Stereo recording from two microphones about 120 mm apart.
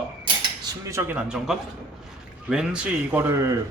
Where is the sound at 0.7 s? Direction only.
35° right (ahead or behind).